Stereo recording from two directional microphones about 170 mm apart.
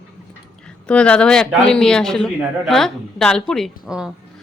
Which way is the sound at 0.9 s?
5° left (ahead or behind).